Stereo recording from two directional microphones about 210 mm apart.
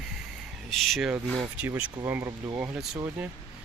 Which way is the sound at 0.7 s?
Centre (ahead or behind).